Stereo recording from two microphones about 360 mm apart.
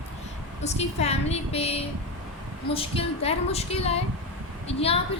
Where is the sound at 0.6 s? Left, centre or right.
Centre.